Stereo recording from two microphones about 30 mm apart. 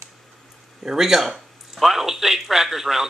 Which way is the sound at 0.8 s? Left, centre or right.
Centre.